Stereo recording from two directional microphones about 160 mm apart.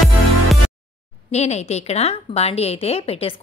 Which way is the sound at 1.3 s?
45° left (ahead or behind).